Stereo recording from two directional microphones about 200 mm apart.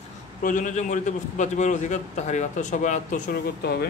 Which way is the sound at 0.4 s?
40° left (ahead or behind).